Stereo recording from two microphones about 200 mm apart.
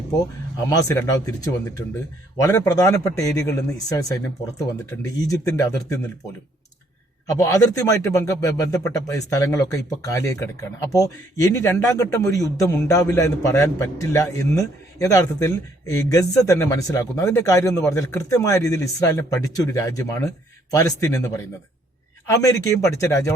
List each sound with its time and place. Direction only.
0.7 s a man's voice: 15° left (ahead or behind)
7.3 s a man's voice: 15° left (ahead or behind)